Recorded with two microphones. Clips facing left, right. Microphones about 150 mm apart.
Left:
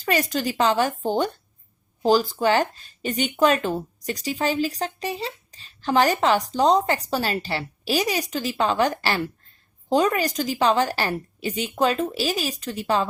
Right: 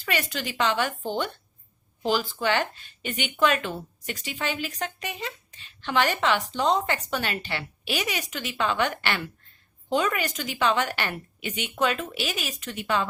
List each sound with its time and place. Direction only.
0.0 s speech: 40° left (ahead or behind)